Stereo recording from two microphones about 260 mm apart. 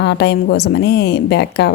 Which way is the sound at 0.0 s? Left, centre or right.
Left.